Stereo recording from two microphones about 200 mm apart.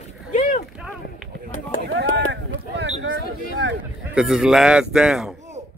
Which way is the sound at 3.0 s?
65° right (ahead or behind).